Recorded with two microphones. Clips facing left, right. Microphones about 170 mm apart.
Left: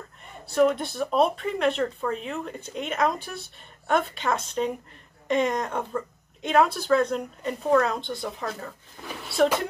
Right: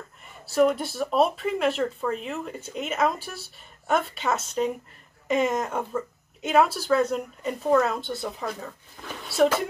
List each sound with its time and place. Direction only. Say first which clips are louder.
0.5 s speech: even; centre (ahead or behind)